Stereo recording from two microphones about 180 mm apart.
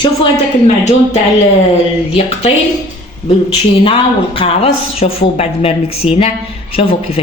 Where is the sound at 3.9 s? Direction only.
30° left (ahead or behind).